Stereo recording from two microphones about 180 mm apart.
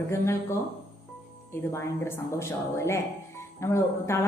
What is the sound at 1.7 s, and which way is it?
A woman's voice, 15° left (ahead or behind).